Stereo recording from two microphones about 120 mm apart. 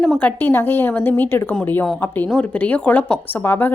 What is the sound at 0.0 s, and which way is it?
A woman's voice, 10° left (ahead or behind).